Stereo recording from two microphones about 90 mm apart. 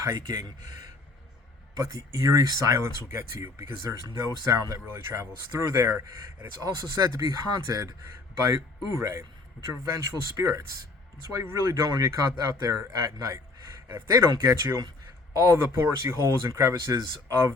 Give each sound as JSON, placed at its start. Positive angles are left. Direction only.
{"t": 0.0, "sound": "speech", "side_deg": -45}
{"t": 2.7, "sound": "speech", "side_deg": -30}
{"t": 13.9, "sound": "speech", "side_deg": -30}